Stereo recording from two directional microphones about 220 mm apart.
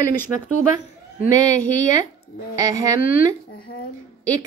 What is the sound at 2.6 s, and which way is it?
Speech, 15° right (ahead or behind).